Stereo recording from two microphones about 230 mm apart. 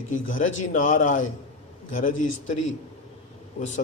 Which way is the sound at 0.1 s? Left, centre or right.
Left.